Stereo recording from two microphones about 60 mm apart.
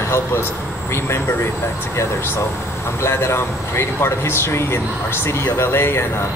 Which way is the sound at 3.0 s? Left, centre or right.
Left.